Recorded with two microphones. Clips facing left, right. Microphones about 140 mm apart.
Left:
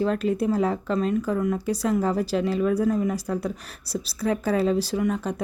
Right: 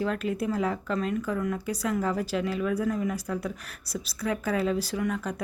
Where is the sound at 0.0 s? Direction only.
30° left (ahead or behind).